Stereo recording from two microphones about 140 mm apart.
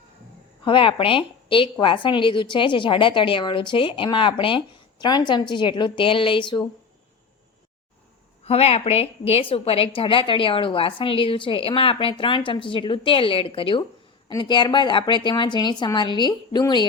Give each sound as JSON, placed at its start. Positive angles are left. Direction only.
{"t": 0.6, "sound": "a woman's voice", "side_deg": 40}
{"t": 8.4, "sound": "a woman's voice", "side_deg": 50}